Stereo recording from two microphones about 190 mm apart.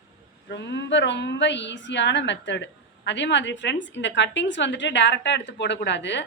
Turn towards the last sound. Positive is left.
turn(degrees=70)  # may be behind; listen again after turning